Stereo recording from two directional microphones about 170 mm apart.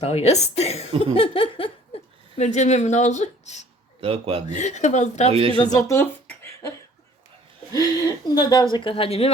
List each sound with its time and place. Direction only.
0.0 s speech: 40° left (ahead or behind)
2.4 s speech: 45° left (ahead or behind)
4.0 s speech: 35° right (ahead or behind)
4.4 s speech: 45° left (ahead or behind)
5.3 s speech: 35° right (ahead or behind)
5.5 s speech: 25° left (ahead or behind)